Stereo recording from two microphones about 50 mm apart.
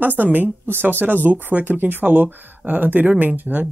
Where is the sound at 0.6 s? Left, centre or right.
Right.